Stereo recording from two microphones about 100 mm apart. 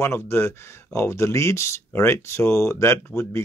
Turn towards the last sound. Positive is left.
turn(degrees=25)  # may be behind; listen again after turning